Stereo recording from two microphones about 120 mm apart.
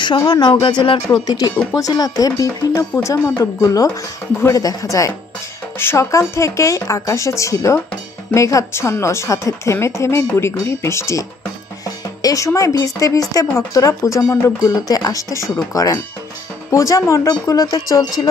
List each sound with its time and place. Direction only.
0.3 s a woman's voice: 40° left (ahead or behind)